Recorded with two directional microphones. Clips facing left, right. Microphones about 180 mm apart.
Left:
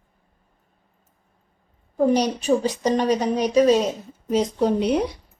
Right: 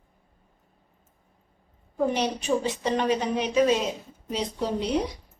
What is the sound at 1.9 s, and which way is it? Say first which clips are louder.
A woman's voice: left 6 dB; 40° left (ahead or behind).